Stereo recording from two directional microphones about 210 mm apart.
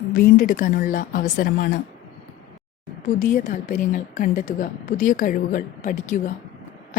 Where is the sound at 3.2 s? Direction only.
40° left (ahead or behind).